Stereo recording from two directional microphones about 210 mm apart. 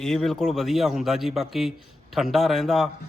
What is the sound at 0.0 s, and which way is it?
A man's voice, centre (ahead or behind).